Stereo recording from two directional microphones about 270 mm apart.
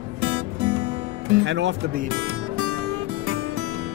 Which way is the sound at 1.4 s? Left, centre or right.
Right.